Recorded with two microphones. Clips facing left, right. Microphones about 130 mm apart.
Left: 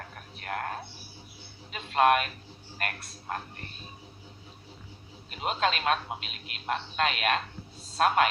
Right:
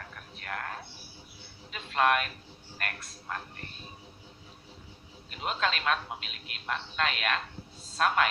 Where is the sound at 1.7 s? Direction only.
40° left (ahead or behind).